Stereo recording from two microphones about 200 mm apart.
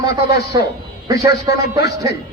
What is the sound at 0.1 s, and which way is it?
Speech, 55° left (ahead or behind).